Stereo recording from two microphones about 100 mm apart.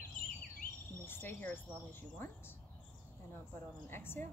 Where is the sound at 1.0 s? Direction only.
20° left (ahead or behind).